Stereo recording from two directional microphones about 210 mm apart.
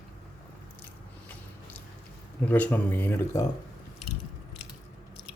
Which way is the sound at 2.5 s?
5° left (ahead or behind).